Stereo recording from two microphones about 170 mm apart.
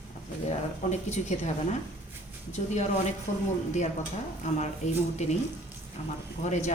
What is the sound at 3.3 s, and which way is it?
Speech, 45° left (ahead or behind).